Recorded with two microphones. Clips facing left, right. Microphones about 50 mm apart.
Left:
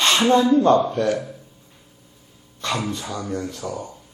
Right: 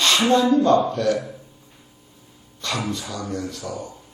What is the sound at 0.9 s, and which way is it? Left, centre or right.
Speech, left.